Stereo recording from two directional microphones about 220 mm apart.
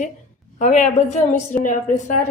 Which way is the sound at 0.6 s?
35° left (ahead or behind).